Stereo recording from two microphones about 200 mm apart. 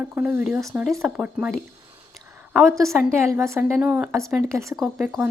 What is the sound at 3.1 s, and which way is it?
A woman's voice, 15° right (ahead or behind).